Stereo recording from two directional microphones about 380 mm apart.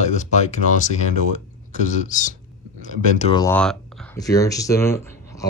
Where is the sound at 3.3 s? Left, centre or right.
Centre.